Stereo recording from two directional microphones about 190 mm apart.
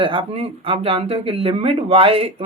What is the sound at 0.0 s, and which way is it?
Speech, 30° right (ahead or behind).